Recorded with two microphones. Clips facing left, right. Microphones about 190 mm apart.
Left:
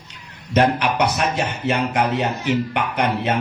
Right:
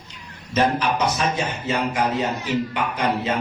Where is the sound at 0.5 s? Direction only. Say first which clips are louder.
Left 3 dB; 65° left (ahead or behind).